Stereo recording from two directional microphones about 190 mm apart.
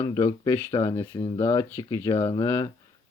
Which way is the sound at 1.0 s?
30° left (ahead or behind).